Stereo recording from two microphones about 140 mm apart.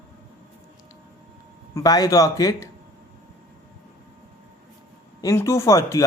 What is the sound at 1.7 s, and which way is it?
Speech, 25° left (ahead or behind).